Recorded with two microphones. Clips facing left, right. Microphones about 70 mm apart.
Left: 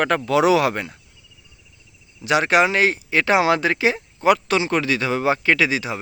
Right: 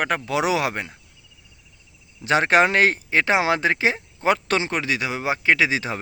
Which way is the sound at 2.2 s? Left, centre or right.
Right.